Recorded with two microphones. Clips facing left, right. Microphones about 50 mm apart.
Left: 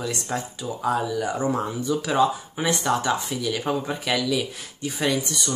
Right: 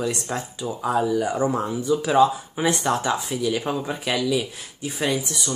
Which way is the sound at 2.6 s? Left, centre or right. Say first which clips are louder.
Right 1 dB; centre.